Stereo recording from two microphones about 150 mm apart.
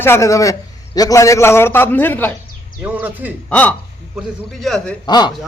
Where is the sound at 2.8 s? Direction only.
10° right (ahead or behind).